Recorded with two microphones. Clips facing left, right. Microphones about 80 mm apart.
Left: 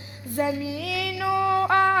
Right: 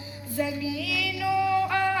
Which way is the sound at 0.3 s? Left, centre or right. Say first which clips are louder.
Left 3 dB; left.